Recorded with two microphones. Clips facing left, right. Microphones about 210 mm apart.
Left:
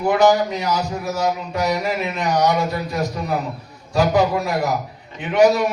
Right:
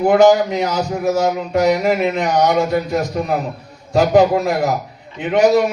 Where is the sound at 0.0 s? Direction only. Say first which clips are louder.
Right 5 dB; 50° right (ahead or behind).